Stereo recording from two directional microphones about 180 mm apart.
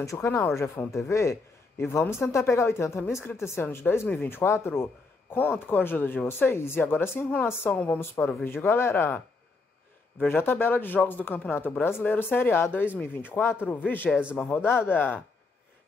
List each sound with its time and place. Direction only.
0.0 s speech: 15° left (ahead or behind)
10.2 s speech: 10° left (ahead or behind)
14.1 s a man's voice: centre (ahead or behind)
14.4 s speech: 10° left (ahead or behind)